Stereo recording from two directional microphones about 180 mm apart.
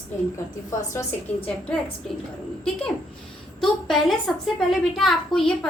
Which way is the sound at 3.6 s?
Centre (ahead or behind).